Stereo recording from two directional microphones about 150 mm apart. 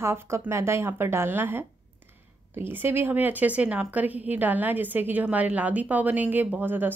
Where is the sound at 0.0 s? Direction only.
15° right (ahead or behind).